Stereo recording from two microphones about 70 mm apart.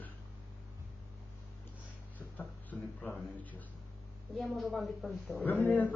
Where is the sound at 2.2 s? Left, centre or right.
Left.